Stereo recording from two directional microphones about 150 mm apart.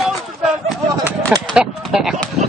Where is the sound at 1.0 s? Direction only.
20° right (ahead or behind).